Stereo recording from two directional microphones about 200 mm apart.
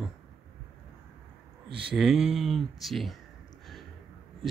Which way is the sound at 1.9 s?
Centre (ahead or behind).